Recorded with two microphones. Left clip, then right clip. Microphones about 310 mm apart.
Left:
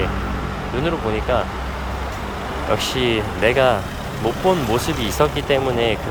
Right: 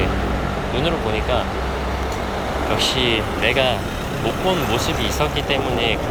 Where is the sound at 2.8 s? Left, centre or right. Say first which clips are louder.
Right 2 dB; centre.